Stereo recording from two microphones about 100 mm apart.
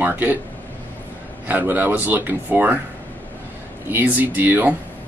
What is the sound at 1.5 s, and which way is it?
Speech, 20° right (ahead or behind).